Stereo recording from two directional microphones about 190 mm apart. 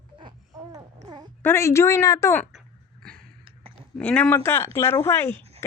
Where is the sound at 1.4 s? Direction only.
15° left (ahead or behind).